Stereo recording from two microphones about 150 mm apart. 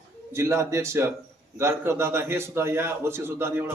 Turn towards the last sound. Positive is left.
turn(degrees=-15)  # may be behind; listen again after turning